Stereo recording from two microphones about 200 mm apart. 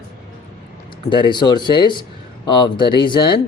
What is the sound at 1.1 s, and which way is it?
Speech, 25° left (ahead or behind).